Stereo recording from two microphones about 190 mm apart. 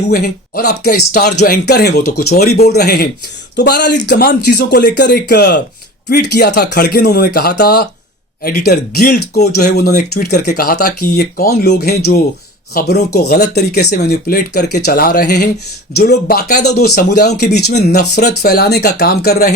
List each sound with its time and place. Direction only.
0.1 s speech: 50° left (ahead or behind)
1.4 s speech: 60° left (ahead or behind)